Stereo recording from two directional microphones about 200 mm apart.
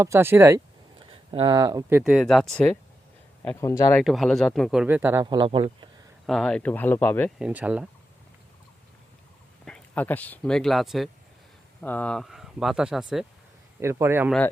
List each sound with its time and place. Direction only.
0.0 s speech: 10° right (ahead or behind)
1.3 s speech: 25° right (ahead or behind); by 4.0 s 15° left (ahead or behind)
4.0 s speech: centre (ahead or behind)
5.2 s speech: 20° right (ahead or behind)
6.2 s speech: centre (ahead or behind)
7.3 s speech: 5° right (ahead or behind)
9.6 s speech: 5° left (ahead or behind)
13.7 s speech: 15° right (ahead or behind)